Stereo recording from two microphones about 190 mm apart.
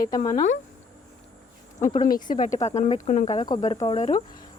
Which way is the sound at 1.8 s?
40° left (ahead or behind).